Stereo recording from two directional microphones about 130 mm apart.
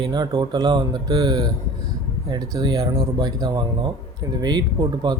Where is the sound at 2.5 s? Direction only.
35° right (ahead or behind).